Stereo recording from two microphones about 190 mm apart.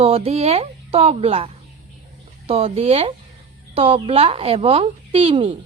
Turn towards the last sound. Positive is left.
turn(degrees=-30)  # may be behind; listen again after turning